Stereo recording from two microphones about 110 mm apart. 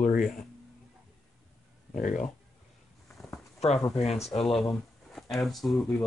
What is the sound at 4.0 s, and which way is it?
Speech, 70° left (ahead or behind).